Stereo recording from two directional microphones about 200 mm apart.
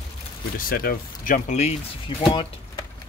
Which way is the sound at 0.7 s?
45° left (ahead or behind).